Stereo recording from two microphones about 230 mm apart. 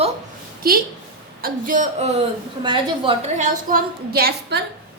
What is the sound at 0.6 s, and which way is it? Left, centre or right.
A woman's voice, right.